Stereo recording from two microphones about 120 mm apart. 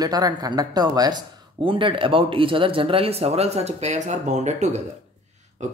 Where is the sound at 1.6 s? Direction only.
45° right (ahead or behind); by 4.6 s 75° right (ahead or behind).